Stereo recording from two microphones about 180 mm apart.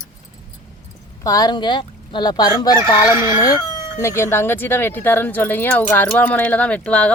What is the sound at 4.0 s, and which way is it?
Speech, 15° left (ahead or behind).